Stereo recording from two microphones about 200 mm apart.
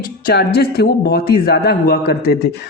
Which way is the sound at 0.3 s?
55° left (ahead or behind).